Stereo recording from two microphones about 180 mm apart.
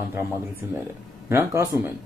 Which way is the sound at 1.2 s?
15° right (ahead or behind).